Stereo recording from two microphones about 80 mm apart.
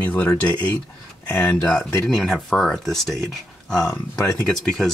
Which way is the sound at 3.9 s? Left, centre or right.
Left.